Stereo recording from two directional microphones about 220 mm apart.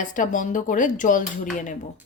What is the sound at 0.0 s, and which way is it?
Speech, 35° left (ahead or behind).